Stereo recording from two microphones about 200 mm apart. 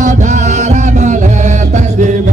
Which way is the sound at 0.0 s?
40° right (ahead or behind).